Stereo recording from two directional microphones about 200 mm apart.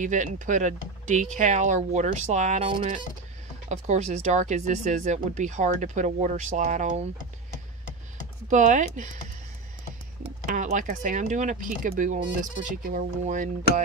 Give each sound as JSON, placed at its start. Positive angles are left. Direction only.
{"t": 0.0, "sound": "speech", "side_deg": -40}
{"t": 8.5, "sound": "speech", "side_deg": -40}
{"t": 10.4, "sound": "speech", "side_deg": -40}